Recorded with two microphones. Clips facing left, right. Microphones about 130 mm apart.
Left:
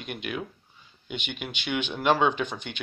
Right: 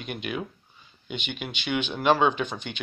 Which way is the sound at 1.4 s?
15° left (ahead or behind).